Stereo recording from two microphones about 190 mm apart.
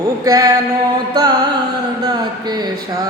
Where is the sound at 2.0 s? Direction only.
20° right (ahead or behind).